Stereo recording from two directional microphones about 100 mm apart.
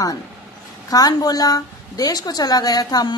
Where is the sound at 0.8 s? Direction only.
40° left (ahead or behind).